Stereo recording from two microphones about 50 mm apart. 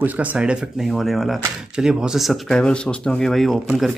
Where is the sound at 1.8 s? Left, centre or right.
Centre.